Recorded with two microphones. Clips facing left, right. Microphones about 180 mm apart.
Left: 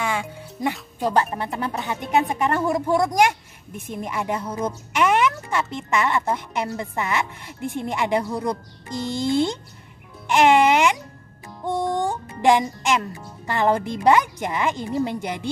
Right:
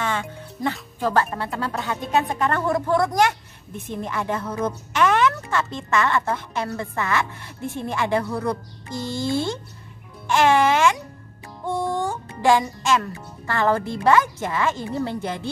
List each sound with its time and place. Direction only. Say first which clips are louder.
0.0 s music: even; 10° left (ahead or behind)
1.0 s a woman's voice: even; 15° left (ahead or behind)